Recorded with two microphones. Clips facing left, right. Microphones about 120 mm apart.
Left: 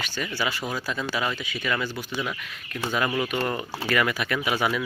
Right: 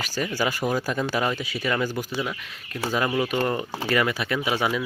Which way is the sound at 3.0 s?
20° right (ahead or behind).